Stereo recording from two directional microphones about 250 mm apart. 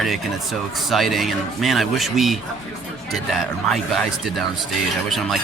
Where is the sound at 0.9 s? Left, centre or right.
Centre.